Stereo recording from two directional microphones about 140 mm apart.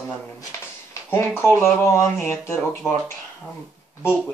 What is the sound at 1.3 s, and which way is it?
Speech, 15° left (ahead or behind).